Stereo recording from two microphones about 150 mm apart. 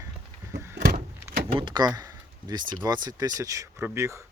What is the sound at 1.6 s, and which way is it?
Speech, 30° right (ahead or behind).